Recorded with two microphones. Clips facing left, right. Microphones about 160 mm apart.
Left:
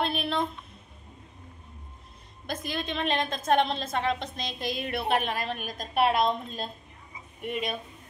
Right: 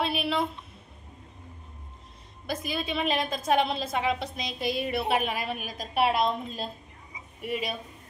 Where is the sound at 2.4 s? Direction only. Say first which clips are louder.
Right 1 dB; 5° right (ahead or behind).